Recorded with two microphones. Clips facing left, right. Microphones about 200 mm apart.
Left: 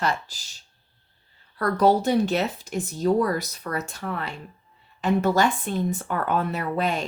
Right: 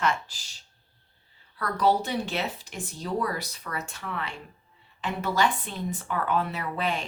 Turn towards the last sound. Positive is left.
turn(degrees=45)  # may be behind; listen again after turning